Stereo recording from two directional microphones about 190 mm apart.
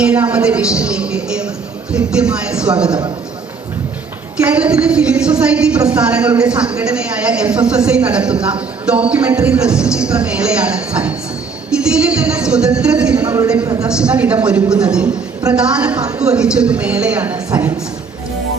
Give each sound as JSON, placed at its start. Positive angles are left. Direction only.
{"t": 0.0, "sound": "speech", "side_deg": -5}
{"t": 4.4, "sound": "a woman's voice", "side_deg": -10}
{"t": 15.5, "sound": "a woman's voice", "side_deg": -5}